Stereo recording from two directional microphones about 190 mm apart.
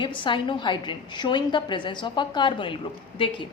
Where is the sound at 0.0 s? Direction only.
25° left (ahead or behind).